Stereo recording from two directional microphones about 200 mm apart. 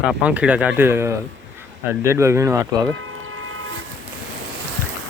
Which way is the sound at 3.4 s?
90° right.